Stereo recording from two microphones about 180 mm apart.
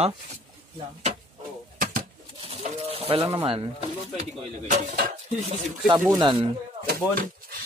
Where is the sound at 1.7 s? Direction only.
50° right (ahead or behind).